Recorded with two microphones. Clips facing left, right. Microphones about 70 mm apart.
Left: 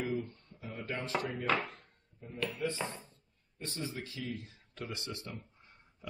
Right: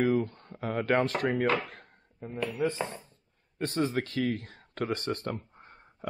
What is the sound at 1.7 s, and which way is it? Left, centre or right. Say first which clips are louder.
Drawer open or close: right 4 dB; right.